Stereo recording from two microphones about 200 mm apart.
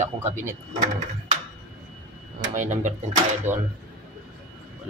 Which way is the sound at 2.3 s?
40° right (ahead or behind).